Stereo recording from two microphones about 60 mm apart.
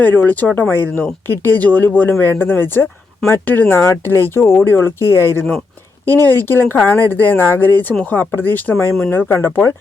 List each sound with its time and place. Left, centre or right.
0.0 s speech: left